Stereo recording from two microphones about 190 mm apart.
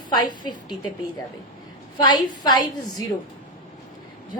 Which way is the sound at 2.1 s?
20° left (ahead or behind).